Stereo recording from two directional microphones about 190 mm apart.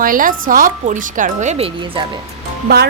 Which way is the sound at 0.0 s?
45° right (ahead or behind).